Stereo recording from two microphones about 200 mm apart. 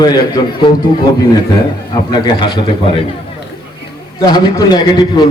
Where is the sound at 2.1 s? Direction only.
20° left (ahead or behind).